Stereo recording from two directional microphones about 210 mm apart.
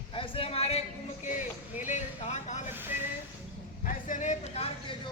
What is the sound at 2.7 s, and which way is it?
Vehicle, 10° right (ahead or behind).